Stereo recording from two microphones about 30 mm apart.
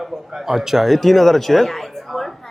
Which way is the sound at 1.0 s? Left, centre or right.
Centre.